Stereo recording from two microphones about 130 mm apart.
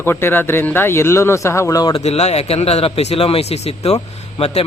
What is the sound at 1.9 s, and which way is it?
A man's voice, 55° left (ahead or behind).